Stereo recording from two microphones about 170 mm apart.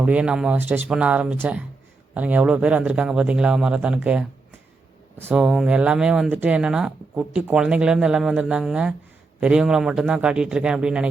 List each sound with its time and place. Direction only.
0.0 s speech: 5° right (ahead or behind)